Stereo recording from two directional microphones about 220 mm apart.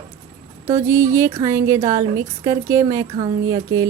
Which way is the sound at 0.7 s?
15° right (ahead or behind).